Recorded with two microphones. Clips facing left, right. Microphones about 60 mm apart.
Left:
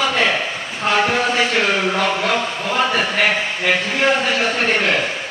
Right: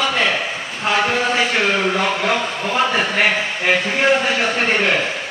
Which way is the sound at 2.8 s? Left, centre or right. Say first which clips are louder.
Even; centre.